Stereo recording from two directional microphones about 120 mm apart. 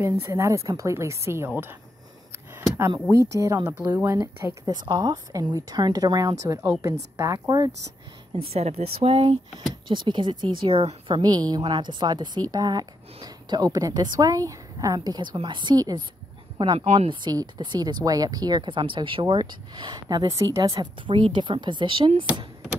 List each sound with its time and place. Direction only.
0.0 s a woman's voice: 25° right (ahead or behind)
3.1 s a woman's voice: 25° right (ahead or behind)
4.6 s a woman's voice: 35° right (ahead or behind)
8.5 s speech: 60° right (ahead or behind)
9.8 s speech: 40° right (ahead or behind)
11.2 s a woman's voice: 35° right (ahead or behind)
16.9 s speech: 55° right (ahead or behind)
17.2 s a woman's voice: 35° right (ahead or behind)
21.1 s speech: 45° right (ahead or behind)